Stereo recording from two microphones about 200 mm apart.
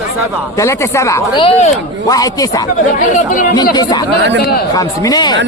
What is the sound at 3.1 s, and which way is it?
Speech, 40° left (ahead or behind).